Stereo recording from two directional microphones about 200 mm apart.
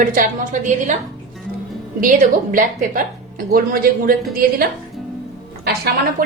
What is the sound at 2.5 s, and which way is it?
Speech, 45° right (ahead or behind).